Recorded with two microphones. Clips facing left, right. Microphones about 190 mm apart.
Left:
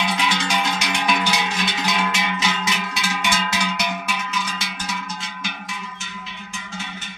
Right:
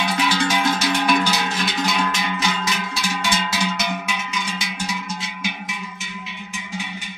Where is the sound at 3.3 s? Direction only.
Centre (ahead or behind).